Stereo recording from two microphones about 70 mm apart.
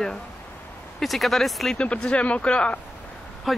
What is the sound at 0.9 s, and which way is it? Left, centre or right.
Speech, centre.